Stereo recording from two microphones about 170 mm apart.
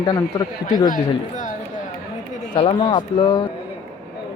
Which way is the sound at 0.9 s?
50° left (ahead or behind).